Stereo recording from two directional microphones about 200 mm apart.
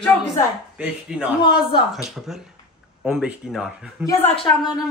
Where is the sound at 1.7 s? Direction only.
25° left (ahead or behind).